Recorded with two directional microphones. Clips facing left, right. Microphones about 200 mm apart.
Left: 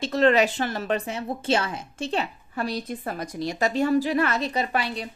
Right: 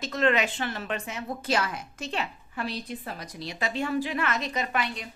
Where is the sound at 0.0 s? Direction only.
35° left (ahead or behind).